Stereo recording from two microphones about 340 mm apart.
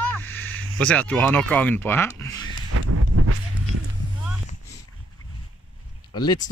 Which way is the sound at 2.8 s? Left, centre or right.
Right.